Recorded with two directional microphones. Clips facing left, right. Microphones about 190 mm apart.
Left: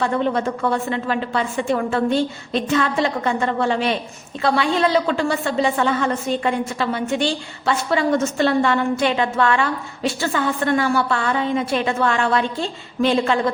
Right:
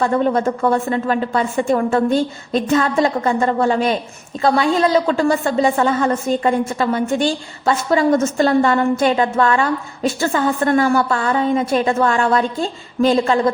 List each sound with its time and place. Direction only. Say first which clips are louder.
0.0 s a woman's voice: right 4 dB; 45° right (ahead or behind)